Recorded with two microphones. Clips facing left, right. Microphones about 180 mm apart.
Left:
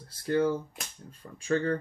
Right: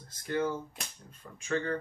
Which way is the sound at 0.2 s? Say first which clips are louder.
Left 5 dB; 35° left (ahead or behind).